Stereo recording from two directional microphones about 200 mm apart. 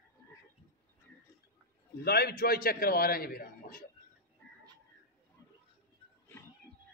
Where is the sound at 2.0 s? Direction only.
50° left (ahead or behind).